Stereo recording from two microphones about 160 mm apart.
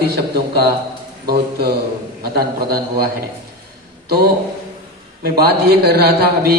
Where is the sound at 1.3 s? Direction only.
75° right (ahead or behind).